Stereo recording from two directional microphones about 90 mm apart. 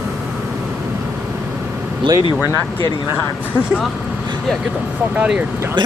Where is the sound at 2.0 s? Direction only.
70° right (ahead or behind).